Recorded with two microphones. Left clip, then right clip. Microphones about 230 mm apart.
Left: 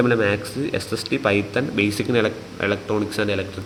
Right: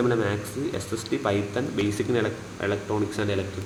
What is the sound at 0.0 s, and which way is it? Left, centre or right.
A man's voice, left.